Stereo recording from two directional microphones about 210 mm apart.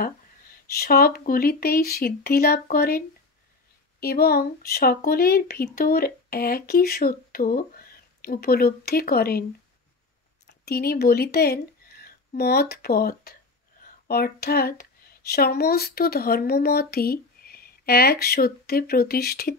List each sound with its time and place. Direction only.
0.7 s speech: 45° left (ahead or behind)
4.0 s speech: 45° left (ahead or behind)